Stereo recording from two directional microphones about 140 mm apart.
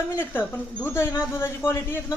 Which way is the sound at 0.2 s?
15° left (ahead or behind).